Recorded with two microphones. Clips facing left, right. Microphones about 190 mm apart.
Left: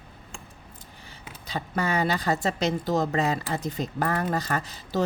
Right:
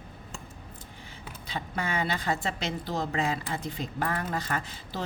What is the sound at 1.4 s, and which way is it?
A woman's voice, 40° left (ahead or behind).